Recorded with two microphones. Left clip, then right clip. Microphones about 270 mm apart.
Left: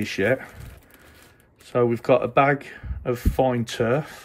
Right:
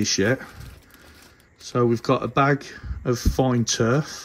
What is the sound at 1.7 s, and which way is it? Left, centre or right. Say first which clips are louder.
Speech: left 2 dB; centre.